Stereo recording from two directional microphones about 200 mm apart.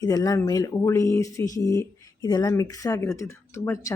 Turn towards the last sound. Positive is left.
turn(degrees=15)  # may be behind; listen again after turning